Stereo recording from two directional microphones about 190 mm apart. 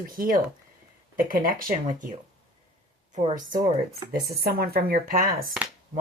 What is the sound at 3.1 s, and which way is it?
Speech, 40° right (ahead or behind).